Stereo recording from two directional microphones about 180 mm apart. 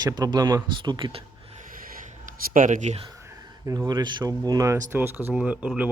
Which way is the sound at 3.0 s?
15° right (ahead or behind).